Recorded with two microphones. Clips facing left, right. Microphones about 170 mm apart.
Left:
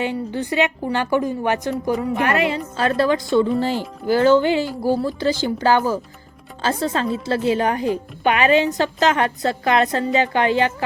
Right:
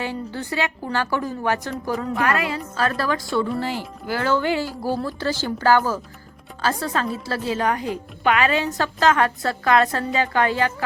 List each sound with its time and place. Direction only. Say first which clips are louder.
0.0 s a woman's voice: left 5 dB; 20° left (ahead or behind)